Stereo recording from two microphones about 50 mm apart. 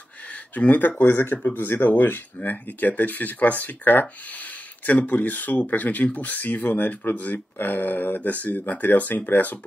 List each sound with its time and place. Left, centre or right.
0.6 s speech: left